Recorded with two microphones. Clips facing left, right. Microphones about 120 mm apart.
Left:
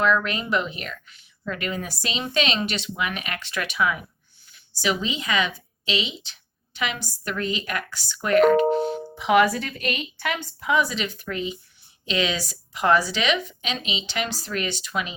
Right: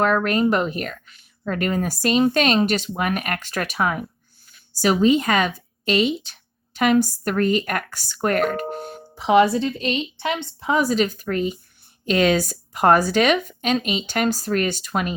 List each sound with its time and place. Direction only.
0.0 s speech: 45° right (ahead or behind)
8.5 s music: 50° right (ahead or behind)
9.1 s a woman's voice: 30° right (ahead or behind)
10.7 s speech: 40° right (ahead or behind)